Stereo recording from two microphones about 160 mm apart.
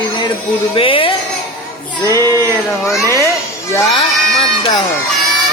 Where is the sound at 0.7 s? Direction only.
35° left (ahead or behind).